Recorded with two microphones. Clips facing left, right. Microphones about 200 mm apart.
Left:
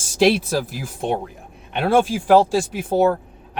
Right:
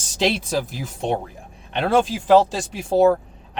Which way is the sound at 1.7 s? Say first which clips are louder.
Left 2 dB; 10° left (ahead or behind).